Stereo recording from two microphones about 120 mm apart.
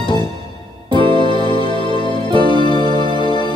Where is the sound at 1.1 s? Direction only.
45° left (ahead or behind).